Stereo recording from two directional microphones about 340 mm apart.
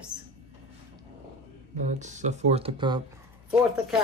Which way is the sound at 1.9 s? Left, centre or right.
Right.